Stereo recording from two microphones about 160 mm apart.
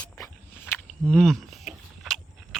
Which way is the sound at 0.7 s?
5° left (ahead or behind).